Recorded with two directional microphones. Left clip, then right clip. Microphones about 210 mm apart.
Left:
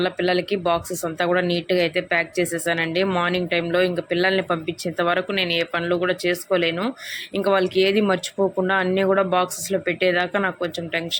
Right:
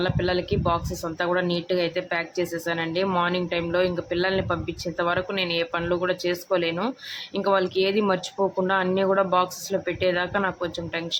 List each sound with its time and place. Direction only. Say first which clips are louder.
0.0 s speech: left 4 dB; 10° left (ahead or behind)